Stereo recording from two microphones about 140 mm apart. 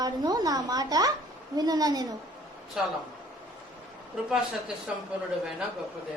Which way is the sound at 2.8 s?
5° right (ahead or behind).